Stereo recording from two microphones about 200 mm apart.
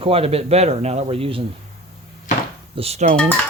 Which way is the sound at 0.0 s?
30° right (ahead or behind).